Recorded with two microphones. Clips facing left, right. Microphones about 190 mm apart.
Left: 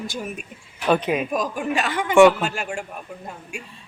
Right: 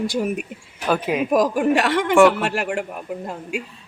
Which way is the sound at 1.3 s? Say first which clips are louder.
Right 7 dB; 70° right (ahead or behind).